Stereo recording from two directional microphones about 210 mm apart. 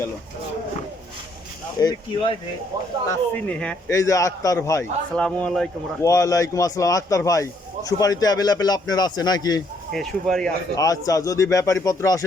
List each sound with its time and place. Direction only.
1.8 s speech: 20° left (ahead or behind)
3.1 s speech: 5° left (ahead or behind)
9.9 s speech: centre (ahead or behind)
10.8 s speech: 15° left (ahead or behind)